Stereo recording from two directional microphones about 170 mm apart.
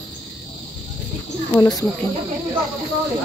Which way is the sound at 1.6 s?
20° left (ahead or behind).